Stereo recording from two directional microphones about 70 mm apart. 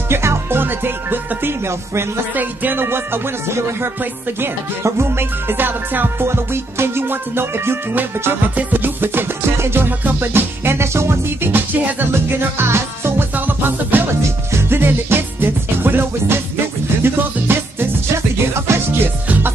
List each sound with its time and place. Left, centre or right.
0.1 s music: right
14.2 s music: right
19.2 s music: right